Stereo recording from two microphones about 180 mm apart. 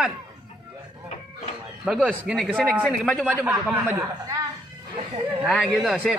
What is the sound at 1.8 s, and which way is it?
Speech, 5° right (ahead or behind).